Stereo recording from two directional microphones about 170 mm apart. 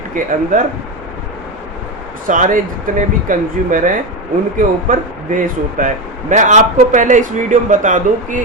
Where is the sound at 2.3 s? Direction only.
50° right (ahead or behind).